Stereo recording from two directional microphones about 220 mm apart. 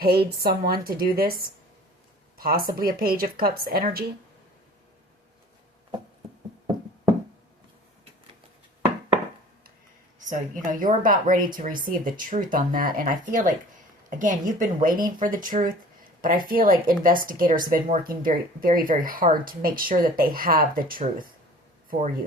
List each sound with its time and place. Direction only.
0.0 s a woman's voice: 45° right (ahead or behind)
10.2 s a woman's voice: 35° right (ahead or behind)